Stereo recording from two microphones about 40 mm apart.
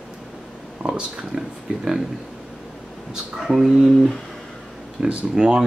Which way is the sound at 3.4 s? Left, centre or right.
Centre.